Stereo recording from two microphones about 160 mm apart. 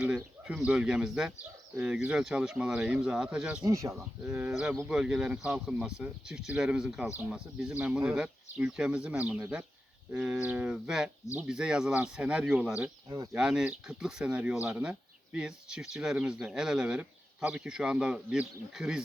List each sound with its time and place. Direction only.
0.0 s speech: 5° right (ahead or behind)
3.6 s speech: 20° right (ahead or behind)
4.3 s speech: 5° right (ahead or behind)
13.1 s speech: 20° right (ahead or behind)
13.3 s speech: 5° right (ahead or behind)